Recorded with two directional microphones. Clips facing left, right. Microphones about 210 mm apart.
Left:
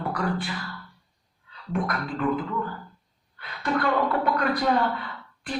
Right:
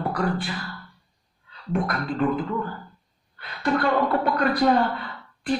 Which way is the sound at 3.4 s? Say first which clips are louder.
Right 3 dB; 35° right (ahead or behind).